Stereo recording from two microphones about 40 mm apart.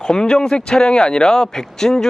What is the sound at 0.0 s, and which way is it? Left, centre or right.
Speech, centre.